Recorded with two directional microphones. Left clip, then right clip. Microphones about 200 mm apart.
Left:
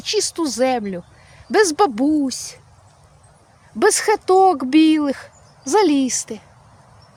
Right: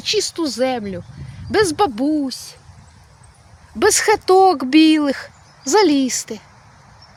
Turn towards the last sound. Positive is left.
turn(degrees=0)  # may be behind; listen again after turning